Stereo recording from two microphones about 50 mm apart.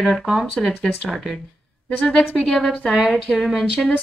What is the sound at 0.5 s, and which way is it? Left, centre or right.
Speech, centre.